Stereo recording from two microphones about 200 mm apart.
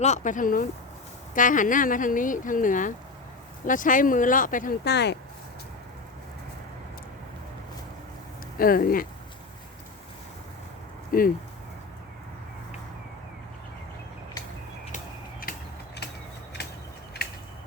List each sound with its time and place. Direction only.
0.0 s speech: 35° left (ahead or behind)
8.5 s speech: 45° left (ahead or behind)
11.1 s speech: 45° left (ahead or behind)
14.9 s a sound: 45° left (ahead or behind)